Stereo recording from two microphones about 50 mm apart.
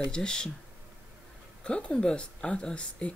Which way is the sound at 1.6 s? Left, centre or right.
Centre.